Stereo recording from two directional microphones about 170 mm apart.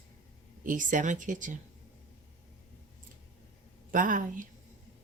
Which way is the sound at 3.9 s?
50° right (ahead or behind).